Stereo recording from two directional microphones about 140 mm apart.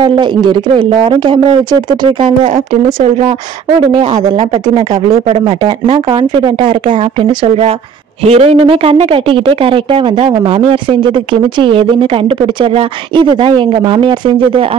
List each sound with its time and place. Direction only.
0.0 s speech: 35° right (ahead or behind)
2.2 s speech: 60° right (ahead or behind)
6.4 s speech: 35° right (ahead or behind)